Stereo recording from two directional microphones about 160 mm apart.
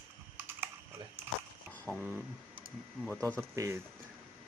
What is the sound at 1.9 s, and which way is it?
Speech, 10° right (ahead or behind).